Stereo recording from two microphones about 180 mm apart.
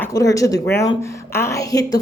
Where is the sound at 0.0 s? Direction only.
20° left (ahead or behind).